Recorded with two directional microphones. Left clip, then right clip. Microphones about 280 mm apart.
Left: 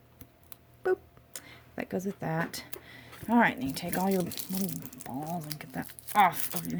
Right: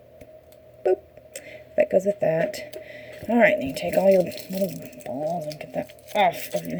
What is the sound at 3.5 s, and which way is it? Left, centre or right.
Speech, centre.